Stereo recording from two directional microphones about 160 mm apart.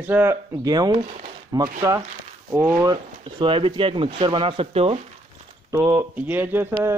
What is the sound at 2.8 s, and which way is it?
Speech, 30° right (ahead or behind).